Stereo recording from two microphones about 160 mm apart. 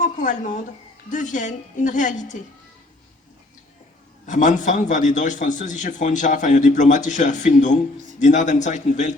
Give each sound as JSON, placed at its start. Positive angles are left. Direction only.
{"t": 0.0, "sound": "a man's voice", "side_deg": 50}
{"t": 4.3, "sound": "a man's voice", "side_deg": 50}